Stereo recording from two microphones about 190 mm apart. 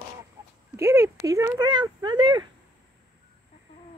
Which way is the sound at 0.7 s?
15° right (ahead or behind).